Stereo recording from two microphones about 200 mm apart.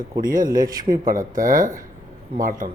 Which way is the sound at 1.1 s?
40° right (ahead or behind).